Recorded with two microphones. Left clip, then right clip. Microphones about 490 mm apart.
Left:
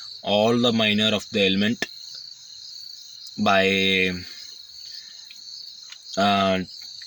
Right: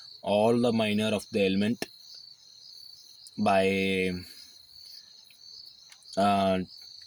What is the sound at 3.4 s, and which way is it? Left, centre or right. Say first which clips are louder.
Speech: left 5 dB; right.